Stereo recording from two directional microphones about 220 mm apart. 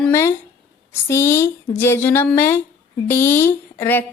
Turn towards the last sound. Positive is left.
turn(degrees=10)  # may be behind; listen again after turning